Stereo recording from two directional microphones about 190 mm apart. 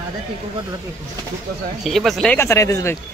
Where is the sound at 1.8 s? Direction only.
Centre (ahead or behind).